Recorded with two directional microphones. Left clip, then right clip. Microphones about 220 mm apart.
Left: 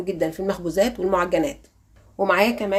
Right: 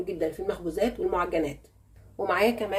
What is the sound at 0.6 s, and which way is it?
A woman's voice, 40° left (ahead or behind).